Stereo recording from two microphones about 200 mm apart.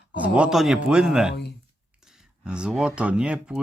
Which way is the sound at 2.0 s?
Centre (ahead or behind).